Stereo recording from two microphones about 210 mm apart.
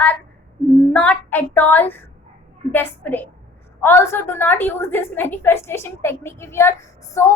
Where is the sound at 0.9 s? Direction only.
5° left (ahead or behind).